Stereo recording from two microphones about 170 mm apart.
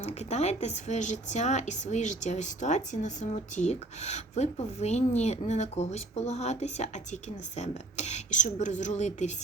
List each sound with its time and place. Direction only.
0.0 s a woman's voice: 40° left (ahead or behind)